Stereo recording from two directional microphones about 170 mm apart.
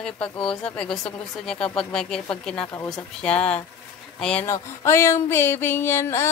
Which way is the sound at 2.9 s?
5° left (ahead or behind).